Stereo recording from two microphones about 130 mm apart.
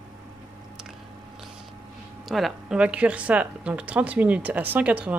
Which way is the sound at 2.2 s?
Centre (ahead or behind).